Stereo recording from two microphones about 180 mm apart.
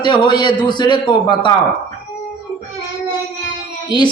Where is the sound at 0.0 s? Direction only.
25° left (ahead or behind).